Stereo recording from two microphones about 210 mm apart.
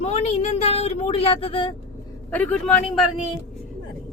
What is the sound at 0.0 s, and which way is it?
Speech, 30° left (ahead or behind).